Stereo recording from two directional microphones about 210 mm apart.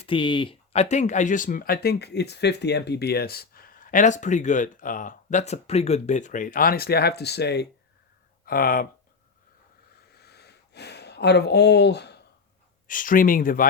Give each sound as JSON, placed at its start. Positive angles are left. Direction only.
{"t": 0.0, "sound": "speech", "side_deg": 25}
{"t": 10.1, "sound": "a sound", "side_deg": 50}
{"t": 12.9, "sound": "speech", "side_deg": 40}